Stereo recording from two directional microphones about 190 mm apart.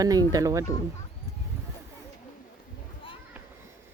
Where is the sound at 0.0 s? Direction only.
20° right (ahead or behind).